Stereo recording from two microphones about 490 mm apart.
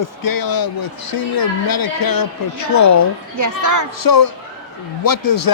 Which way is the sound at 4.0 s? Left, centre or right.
Left.